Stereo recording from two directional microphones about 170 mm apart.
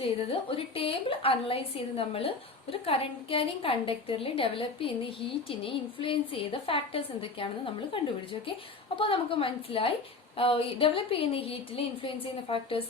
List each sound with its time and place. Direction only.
0.0 s a woman's voice: 35° left (ahead or behind)